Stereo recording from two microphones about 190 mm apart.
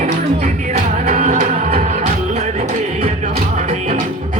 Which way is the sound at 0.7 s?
40° right (ahead or behind).